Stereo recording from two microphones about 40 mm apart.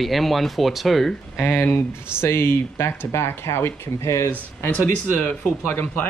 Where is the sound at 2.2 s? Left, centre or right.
Left.